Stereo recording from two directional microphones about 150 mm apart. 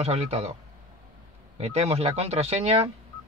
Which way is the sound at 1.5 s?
45° right (ahead or behind).